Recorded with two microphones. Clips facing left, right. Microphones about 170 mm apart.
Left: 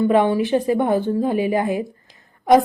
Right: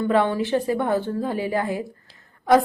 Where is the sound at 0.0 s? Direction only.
15° left (ahead or behind).